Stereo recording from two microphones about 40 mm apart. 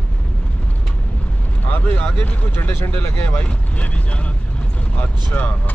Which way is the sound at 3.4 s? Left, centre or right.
Left.